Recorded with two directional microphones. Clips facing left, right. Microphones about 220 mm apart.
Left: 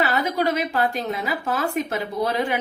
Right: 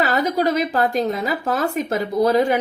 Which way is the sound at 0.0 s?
35° right (ahead or behind).